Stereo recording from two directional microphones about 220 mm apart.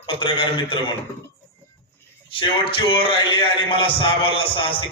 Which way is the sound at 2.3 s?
25° left (ahead or behind).